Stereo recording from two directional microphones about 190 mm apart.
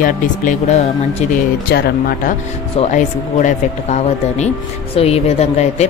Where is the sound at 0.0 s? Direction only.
45° left (ahead or behind).